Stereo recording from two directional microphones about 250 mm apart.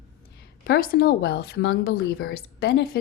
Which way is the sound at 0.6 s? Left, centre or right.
Left.